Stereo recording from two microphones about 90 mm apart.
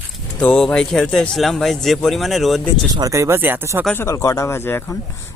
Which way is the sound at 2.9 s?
40° right (ahead or behind).